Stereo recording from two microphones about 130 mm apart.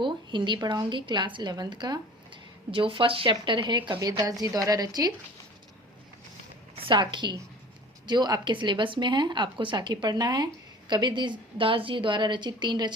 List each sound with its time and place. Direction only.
0.0 s a woman's voice: 40° right (ahead or behind)
6.7 s a woman's voice: 40° right (ahead or behind)